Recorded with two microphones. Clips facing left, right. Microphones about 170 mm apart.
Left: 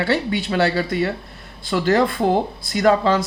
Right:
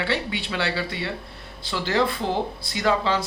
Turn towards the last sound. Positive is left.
turn(degrees=45)  # may be behind; listen again after turning